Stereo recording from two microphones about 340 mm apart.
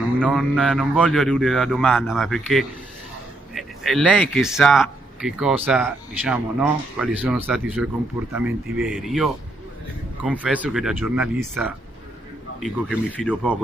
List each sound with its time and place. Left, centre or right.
0.2 s speech: centre